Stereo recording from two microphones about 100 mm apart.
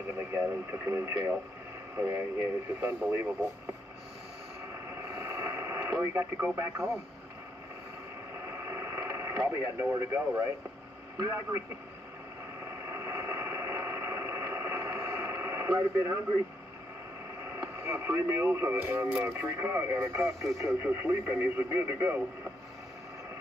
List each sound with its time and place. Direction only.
0.3 s speech: 25° right (ahead or behind)
5.0 s radio: 25° right (ahead or behind)
8.5 s radio: 25° right (ahead or behind)
9.7 s speech: 25° right (ahead or behind)
12.8 s a sound: 25° right (ahead or behind)
17.6 s speech: 25° right (ahead or behind)